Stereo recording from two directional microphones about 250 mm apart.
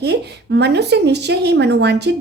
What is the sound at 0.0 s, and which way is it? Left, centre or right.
A woman's voice, right.